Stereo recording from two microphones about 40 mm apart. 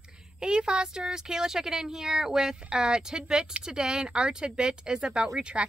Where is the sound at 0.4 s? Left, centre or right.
Right.